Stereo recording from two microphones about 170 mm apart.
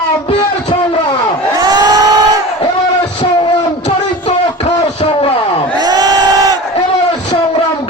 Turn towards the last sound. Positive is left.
turn(degrees=-25)  # may be behind; listen again after turning